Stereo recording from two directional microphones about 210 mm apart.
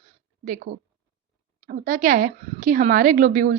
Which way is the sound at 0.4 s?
40° right (ahead or behind).